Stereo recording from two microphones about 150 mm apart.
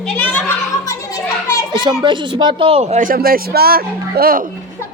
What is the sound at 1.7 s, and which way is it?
A child's voice, 30° right (ahead or behind).